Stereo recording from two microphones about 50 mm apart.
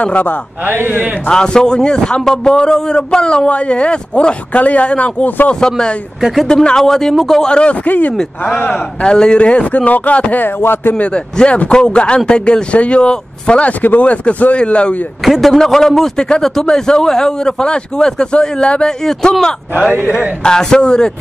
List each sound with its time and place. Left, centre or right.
0.0 s a man's voice: left
0.7 s a man's voice: right
1.3 s a man's voice: centre
5.5 s a man's voice: centre
7.4 s a man's voice: centre
7.8 s a man's voice: left
8.1 s a man's voice: centre; by 10.4 s left
10.4 s speech: left
11.0 s a man's voice: left
15.2 s a man's voice: centre
20.4 s a man's voice: centre